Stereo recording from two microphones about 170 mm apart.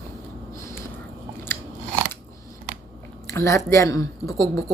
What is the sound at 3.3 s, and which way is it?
Speech, 15° left (ahead or behind).